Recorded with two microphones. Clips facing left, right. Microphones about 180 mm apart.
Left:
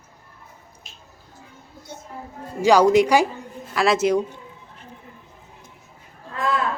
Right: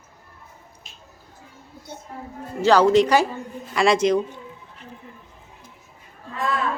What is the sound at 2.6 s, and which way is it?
Speech, 10° left (ahead or behind).